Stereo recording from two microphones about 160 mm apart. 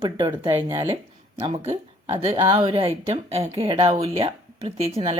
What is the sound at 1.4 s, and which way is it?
Speech, 40° right (ahead or behind).